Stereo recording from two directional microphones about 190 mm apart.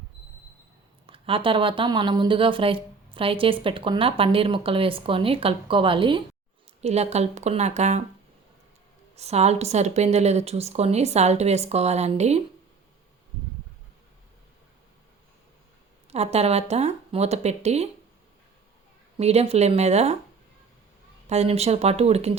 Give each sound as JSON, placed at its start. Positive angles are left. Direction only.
{"t": 1.0, "sound": "a woman's voice", "side_deg": -30}
{"t": 9.1, "sound": "a woman's voice", "side_deg": -35}
{"t": 16.0, "sound": "a woman's voice", "side_deg": -35}
{"t": 19.1, "sound": "a woman's voice", "side_deg": -35}
{"t": 21.2, "sound": "a woman's voice", "side_deg": -35}